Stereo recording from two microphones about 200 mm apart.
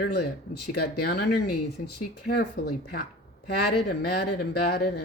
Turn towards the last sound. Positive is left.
turn(degrees=50)  # may be behind; listen again after turning